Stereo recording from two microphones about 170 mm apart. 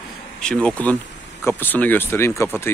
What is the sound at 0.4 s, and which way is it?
Speech, 5° left (ahead or behind).